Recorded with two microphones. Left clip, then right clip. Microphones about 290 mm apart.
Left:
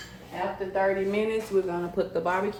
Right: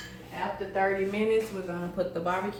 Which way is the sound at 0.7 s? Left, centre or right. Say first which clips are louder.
Left 2 dB; left.